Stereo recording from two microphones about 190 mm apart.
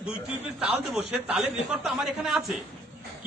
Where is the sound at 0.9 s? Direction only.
Centre (ahead or behind).